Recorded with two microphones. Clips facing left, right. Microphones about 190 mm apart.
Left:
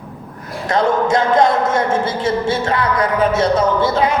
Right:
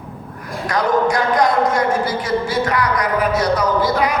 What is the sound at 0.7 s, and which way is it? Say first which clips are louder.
A man's voice: left 2 dB; 25° left (ahead or behind).